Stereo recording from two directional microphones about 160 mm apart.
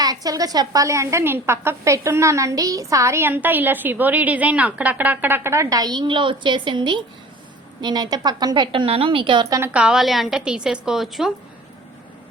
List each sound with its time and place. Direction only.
0.0 s a woman's voice: 25° right (ahead or behind)
9.6 s a woman's voice: 5° right (ahead or behind)